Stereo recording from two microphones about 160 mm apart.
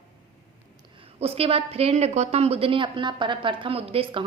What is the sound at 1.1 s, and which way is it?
A woman's voice, 40° right (ahead or behind).